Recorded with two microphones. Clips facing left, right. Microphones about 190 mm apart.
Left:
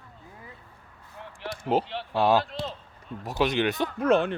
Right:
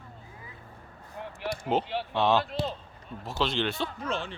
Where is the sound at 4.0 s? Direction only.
60° left (ahead or behind).